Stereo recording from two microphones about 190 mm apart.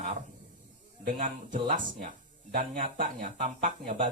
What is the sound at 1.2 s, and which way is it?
Speech, 40° right (ahead or behind).